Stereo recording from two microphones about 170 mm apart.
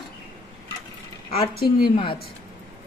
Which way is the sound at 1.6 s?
65° left (ahead or behind).